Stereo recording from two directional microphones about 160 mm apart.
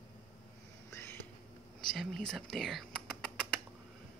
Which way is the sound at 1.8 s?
5° left (ahead or behind).